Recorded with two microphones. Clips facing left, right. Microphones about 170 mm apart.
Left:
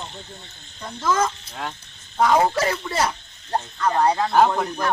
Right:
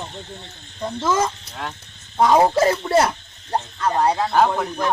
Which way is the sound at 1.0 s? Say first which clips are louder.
Even; 20° right (ahead or behind).